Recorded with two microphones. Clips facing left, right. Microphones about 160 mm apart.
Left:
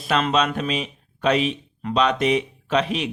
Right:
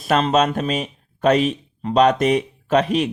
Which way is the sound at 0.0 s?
45° right (ahead or behind).